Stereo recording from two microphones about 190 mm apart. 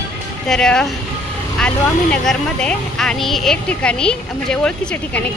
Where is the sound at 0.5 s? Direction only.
5° left (ahead or behind).